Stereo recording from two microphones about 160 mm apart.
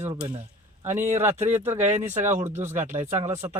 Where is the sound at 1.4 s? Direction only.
45° right (ahead or behind).